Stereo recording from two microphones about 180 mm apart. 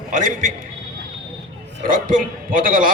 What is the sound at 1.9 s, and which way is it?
Speech, 50° right (ahead or behind).